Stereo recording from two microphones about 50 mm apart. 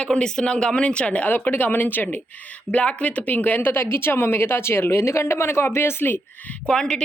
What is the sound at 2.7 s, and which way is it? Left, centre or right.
Speech, left.